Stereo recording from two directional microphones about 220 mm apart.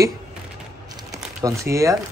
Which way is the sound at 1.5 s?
15° right (ahead or behind).